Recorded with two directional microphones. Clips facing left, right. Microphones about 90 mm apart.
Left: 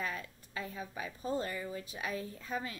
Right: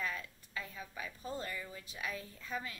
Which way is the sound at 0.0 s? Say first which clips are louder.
Left 2 dB; 30° left (ahead or behind).